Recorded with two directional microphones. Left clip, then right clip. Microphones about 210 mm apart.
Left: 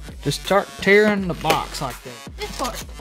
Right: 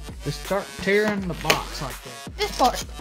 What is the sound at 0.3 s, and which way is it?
Speech, 45° left (ahead or behind).